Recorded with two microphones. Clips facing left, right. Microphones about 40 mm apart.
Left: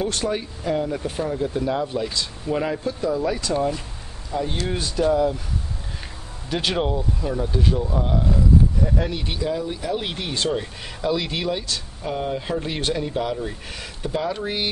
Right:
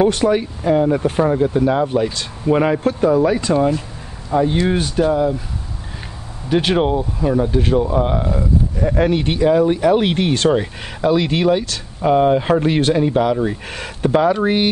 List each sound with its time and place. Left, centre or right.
0.0 s speech: right
2.8 s speech: right
4.3 s speech: right
4.6 s speech: right
5.1 s speech: centre
6.5 s speech: right
10.5 s speech: right
11.6 s speech: right
12.1 s speech: right
13.7 s speech: right